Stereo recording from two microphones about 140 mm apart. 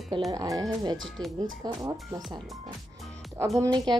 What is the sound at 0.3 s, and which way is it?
Speech, 25° right (ahead or behind).